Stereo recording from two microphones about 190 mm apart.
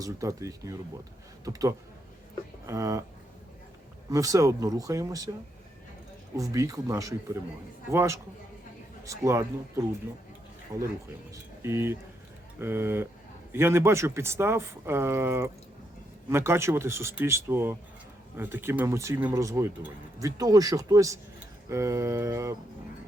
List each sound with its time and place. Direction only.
0.0 s speech: 15° right (ahead or behind)
4.1 s speech: 15° right (ahead or behind)
6.3 s speech: 15° right (ahead or behind)
11.6 s speech: 10° right (ahead or behind)